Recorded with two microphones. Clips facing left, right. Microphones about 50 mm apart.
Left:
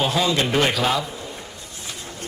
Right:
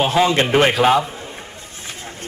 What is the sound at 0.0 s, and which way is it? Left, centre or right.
A man's voice, right.